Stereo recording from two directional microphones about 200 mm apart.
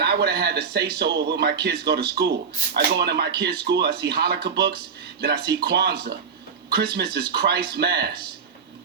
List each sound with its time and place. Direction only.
0.0 s speech: 55° right (ahead or behind)